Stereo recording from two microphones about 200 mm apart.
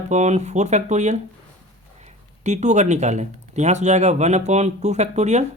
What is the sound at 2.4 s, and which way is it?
Speech, 35° right (ahead or behind).